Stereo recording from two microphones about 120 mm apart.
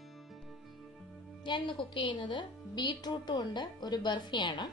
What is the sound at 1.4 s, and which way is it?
A woman's voice, 40° left (ahead or behind).